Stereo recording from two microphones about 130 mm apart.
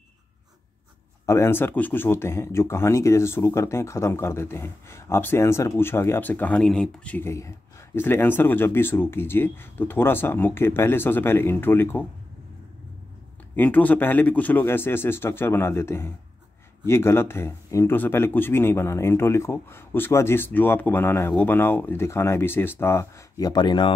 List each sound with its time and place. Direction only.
1.2 s speech: 20° left (ahead or behind)
13.6 s speech: 15° left (ahead or behind); by 23.9 s 35° left (ahead or behind)